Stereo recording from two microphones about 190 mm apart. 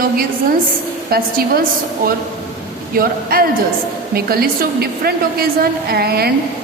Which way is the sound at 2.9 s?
50° right (ahead or behind).